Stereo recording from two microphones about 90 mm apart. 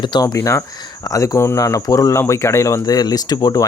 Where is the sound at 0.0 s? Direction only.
55° left (ahead or behind).